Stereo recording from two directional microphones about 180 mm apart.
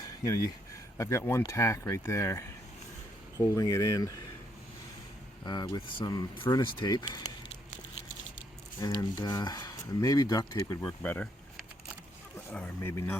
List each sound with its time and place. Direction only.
0.9 s speech: 15° left (ahead or behind)
5.5 s speech: 25° left (ahead or behind)
8.8 s speech: 20° left (ahead or behind)